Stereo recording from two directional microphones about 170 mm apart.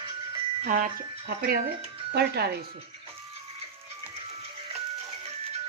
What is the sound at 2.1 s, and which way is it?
Speech, 70° right (ahead or behind).